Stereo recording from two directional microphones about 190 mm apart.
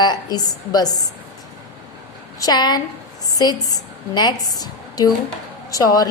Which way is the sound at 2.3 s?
20° left (ahead or behind).